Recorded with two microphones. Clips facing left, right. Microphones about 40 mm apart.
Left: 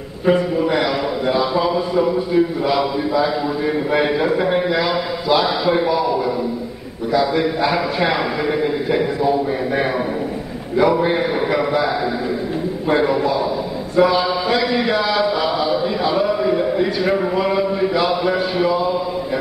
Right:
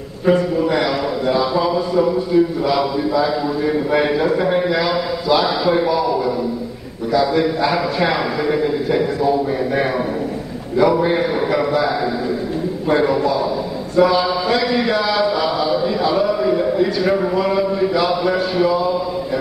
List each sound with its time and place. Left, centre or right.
0.2 s a man's voice: centre
10.8 s a sound: centre
12.8 s a man's voice: centre
13.9 s chant: centre